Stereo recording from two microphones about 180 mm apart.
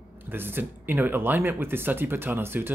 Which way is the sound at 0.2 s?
10° right (ahead or behind).